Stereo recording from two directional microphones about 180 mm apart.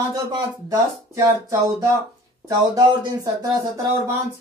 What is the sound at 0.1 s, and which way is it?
Speech, 20° right (ahead or behind).